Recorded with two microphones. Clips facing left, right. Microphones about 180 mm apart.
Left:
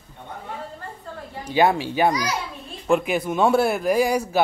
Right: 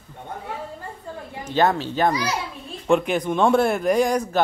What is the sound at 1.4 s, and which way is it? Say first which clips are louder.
Speech: left 1 dB; 10° left (ahead or behind).